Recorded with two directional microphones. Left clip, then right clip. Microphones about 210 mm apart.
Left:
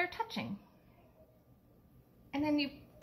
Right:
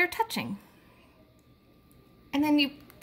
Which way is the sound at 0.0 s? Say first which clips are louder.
Right 9 dB; 55° right (ahead or behind).